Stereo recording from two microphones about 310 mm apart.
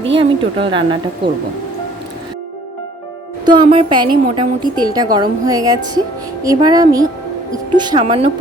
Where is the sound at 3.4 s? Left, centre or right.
Centre.